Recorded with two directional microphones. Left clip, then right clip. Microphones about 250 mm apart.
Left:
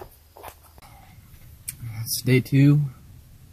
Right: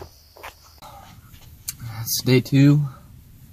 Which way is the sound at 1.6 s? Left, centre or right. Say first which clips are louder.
Right 5 dB; left.